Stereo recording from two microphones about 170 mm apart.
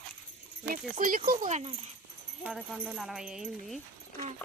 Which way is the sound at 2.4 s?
5° right (ahead or behind).